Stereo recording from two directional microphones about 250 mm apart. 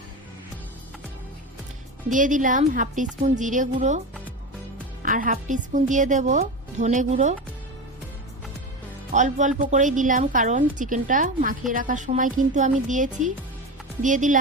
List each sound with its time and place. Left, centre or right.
2.0 s a woman's voice: right
5.0 s a woman's voice: right
9.1 s a woman's voice: right